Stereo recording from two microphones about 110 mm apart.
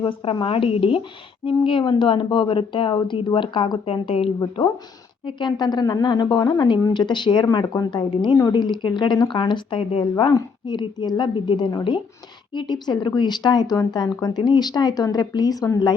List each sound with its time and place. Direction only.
0.0 s a woman's voice: 50° left (ahead or behind)
4.4 s a woman's voice: 45° left (ahead or behind)